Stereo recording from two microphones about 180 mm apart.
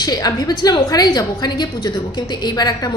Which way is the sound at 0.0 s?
20° left (ahead or behind).